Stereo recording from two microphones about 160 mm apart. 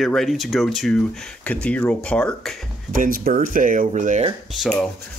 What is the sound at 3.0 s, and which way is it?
Speech, 65° right (ahead or behind).